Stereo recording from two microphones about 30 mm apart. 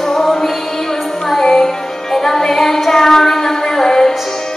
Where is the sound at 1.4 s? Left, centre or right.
Centre.